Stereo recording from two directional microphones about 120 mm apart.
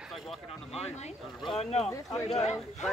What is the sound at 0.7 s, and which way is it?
Speech, 65° left (ahead or behind).